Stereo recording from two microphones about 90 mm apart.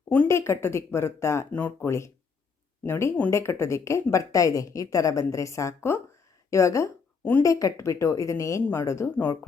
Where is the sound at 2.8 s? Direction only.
30° left (ahead or behind).